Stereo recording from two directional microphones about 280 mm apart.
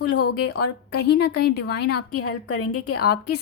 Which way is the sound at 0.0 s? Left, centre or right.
Left.